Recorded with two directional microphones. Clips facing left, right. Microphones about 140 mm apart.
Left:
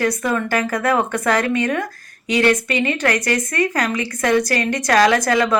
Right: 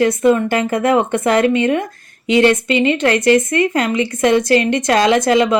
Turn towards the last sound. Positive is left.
turn(degrees=-20)  # may be behind; listen again after turning